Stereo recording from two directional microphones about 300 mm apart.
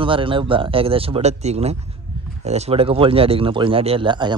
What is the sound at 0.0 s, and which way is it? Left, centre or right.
Speech, centre.